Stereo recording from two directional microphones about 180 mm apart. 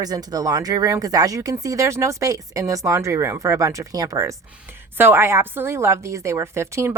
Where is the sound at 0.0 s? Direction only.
20° right (ahead or behind).